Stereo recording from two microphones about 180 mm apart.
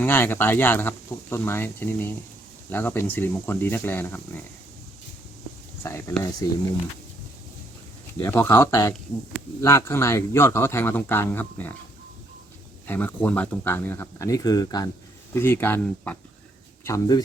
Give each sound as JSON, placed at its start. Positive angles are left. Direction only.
{"t": 0.0, "sound": "a man's voice", "side_deg": 10}
{"t": 5.8, "sound": "a man's voice", "side_deg": 15}
{"t": 8.2, "sound": "a man's voice", "side_deg": 10}
{"t": 12.9, "sound": "a man's voice", "side_deg": 10}